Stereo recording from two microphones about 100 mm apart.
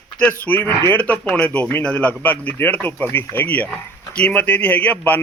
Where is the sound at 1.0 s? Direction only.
10° left (ahead or behind).